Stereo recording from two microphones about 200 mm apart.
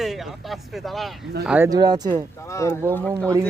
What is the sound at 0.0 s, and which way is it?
Speech, centre (ahead or behind).